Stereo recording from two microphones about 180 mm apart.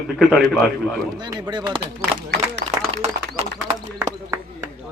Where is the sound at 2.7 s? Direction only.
35° right (ahead or behind).